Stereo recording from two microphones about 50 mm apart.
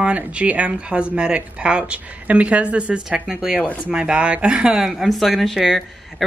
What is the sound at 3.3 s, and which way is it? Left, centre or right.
Speech, centre.